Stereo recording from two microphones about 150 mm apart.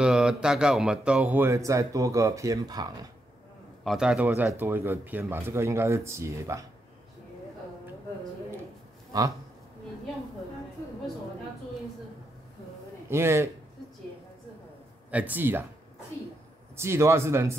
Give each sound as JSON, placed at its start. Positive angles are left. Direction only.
{"t": 0.0, "sound": "speech", "side_deg": -5}
{"t": 3.8, "sound": "a man's voice", "side_deg": 0}
{"t": 13.1, "sound": "speech", "side_deg": -15}
{"t": 15.0, "sound": "speech", "side_deg": -10}
{"t": 16.7, "sound": "speech", "side_deg": -15}